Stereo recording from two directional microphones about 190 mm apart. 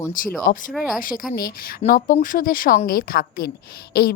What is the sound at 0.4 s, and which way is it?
A woman's voice, 45° left (ahead or behind).